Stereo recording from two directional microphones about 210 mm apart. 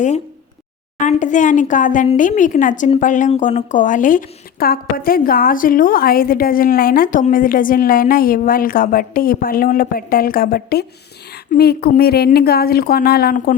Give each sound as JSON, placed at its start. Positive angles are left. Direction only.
{"t": 0.9, "sound": "a woman's voice", "side_deg": 35}